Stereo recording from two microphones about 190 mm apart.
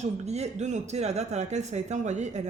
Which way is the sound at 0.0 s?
35° right (ahead or behind).